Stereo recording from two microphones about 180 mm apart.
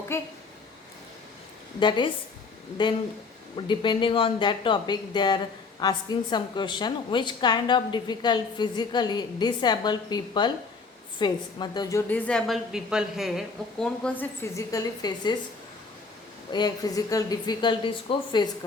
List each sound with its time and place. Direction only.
0.1 s a woman's voice: 15° left (ahead or behind)
1.8 s a woman's voice: 25° left (ahead or behind)
16.5 s speech: 25° left (ahead or behind)